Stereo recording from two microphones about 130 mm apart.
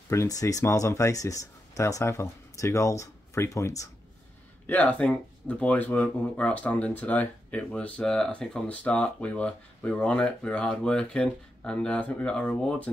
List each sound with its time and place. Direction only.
0.1 s speech: 25° left (ahead or behind)
4.6 s speech: 10° left (ahead or behind)